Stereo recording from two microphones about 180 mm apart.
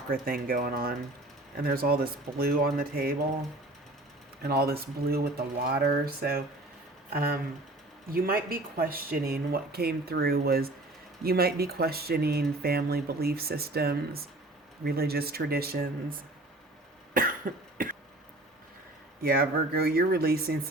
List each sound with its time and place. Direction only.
0.1 s speech: 55° right (ahead or behind)
4.4 s speech: 60° right (ahead or behind)
17.2 s cough: 50° right (ahead or behind)
19.2 s speech: 55° right (ahead or behind)